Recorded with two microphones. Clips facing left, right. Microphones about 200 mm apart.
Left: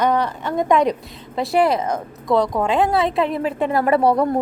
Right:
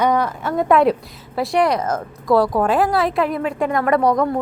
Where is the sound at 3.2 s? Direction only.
30° left (ahead or behind).